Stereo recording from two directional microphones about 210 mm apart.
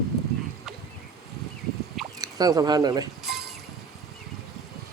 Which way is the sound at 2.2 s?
20° right (ahead or behind).